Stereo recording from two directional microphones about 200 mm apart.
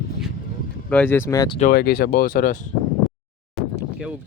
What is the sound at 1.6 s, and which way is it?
Speech, 50° left (ahead or behind).